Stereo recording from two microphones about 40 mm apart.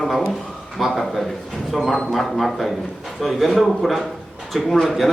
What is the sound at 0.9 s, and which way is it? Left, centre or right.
Speech, centre.